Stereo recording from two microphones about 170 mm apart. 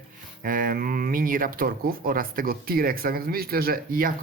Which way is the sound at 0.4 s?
55° right (ahead or behind).